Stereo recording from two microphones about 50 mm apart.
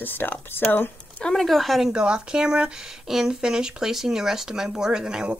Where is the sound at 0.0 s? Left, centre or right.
Left.